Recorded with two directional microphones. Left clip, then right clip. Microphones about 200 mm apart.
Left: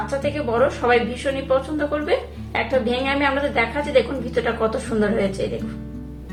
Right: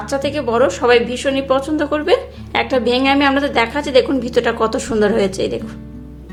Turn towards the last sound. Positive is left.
turn(degrees=-45)  # may be behind; listen again after turning